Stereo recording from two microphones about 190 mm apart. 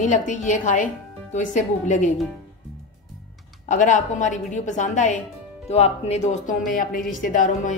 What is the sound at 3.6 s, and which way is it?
A woman's voice, 40° left (ahead or behind).